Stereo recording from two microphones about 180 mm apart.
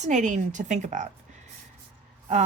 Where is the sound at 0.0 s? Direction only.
40° right (ahead or behind).